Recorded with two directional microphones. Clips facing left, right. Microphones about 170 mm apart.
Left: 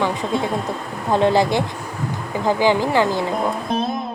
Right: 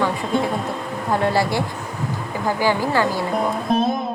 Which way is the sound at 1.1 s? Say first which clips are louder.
Left 4 dB; 20° left (ahead or behind).